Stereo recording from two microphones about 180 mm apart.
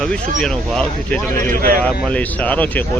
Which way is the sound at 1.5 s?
55° right (ahead or behind).